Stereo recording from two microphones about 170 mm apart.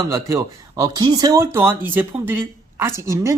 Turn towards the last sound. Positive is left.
turn(degrees=-15)  # may be behind; listen again after turning